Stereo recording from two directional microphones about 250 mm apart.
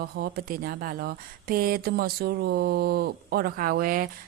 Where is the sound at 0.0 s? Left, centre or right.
Right.